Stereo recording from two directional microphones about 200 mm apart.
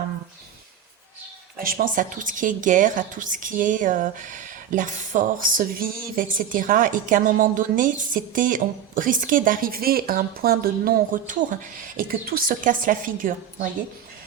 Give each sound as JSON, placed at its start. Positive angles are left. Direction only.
{"t": 1.5, "sound": "a woman's voice", "side_deg": -45}